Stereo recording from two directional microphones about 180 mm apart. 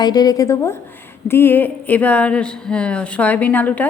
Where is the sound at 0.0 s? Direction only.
20° left (ahead or behind).